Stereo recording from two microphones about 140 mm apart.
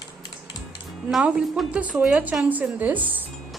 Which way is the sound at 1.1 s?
5° right (ahead or behind).